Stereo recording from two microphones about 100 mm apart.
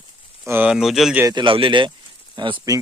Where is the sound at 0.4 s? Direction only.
20° right (ahead or behind).